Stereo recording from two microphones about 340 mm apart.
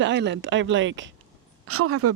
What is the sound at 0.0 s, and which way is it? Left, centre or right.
Speech, right.